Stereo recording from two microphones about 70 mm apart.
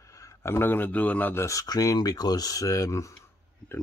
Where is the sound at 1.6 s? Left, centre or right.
Left.